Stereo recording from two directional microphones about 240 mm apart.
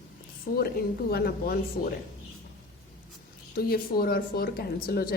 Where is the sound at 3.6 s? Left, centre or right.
Left.